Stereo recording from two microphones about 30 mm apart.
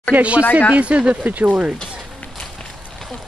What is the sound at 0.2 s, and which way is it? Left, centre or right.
Speech, right.